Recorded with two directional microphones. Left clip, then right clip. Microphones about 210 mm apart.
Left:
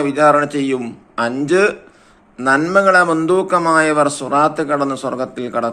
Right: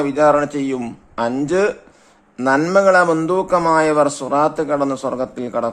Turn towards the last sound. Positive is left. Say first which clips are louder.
# left 1 dB
turn(degrees=-30)  # may be behind; listen again after turning